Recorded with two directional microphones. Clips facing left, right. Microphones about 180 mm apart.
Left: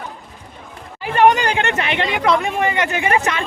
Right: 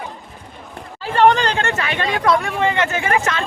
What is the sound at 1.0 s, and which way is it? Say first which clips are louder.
Speech: even; 10° left (ahead or behind).